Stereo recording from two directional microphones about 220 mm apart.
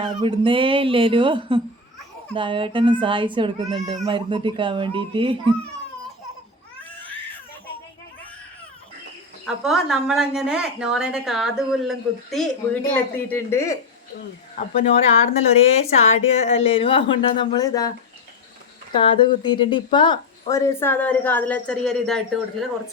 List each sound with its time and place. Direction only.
0.0 s speech: 25° right (ahead or behind)
9.5 s a woman's voice: centre (ahead or behind)
14.8 s speech: 30° left (ahead or behind)
18.9 s speech: 20° left (ahead or behind); by 22.4 s centre (ahead or behind)